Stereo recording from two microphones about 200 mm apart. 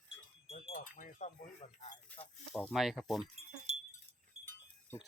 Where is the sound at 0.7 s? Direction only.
40° left (ahead or behind).